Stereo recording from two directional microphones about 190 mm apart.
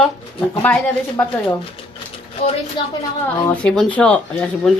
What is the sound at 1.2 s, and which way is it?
Speech, 10° left (ahead or behind).